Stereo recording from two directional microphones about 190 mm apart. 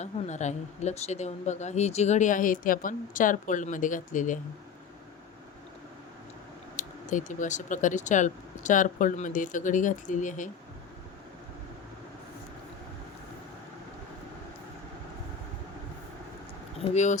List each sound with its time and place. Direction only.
0.0 s speech: 35° left (ahead or behind)
6.7 s speech: 40° left (ahead or behind)
16.9 s speech: 40° left (ahead or behind)